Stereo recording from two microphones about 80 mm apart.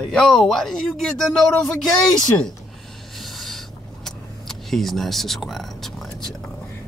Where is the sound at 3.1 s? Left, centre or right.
Centre.